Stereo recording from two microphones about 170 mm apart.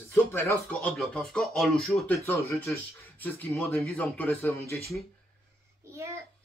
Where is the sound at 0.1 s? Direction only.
15° left (ahead or behind).